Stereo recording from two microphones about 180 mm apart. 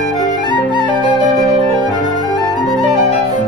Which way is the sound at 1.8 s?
25° right (ahead or behind).